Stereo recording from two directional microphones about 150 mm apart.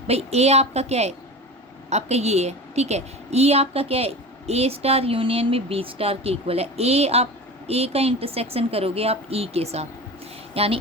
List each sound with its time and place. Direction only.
0.1 s a woman's voice: 45° right (ahead or behind)